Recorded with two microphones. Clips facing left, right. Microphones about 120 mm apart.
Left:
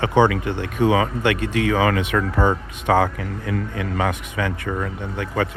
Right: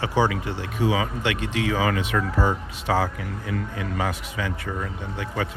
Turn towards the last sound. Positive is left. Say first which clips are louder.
# left 5 dB
turn(degrees=60)  # may be behind; listen again after turning